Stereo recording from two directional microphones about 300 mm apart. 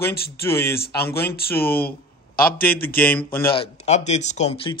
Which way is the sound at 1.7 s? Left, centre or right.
Left.